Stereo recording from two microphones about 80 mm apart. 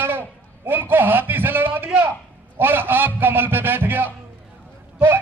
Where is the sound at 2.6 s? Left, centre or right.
Right.